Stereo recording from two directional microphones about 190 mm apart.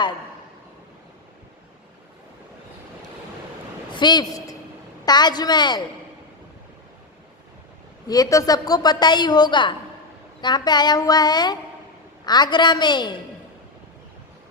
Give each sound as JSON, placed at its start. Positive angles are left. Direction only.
{"t": 3.9, "sound": "a woman's voice", "side_deg": 20}
{"t": 8.0, "sound": "a woman's voice", "side_deg": 20}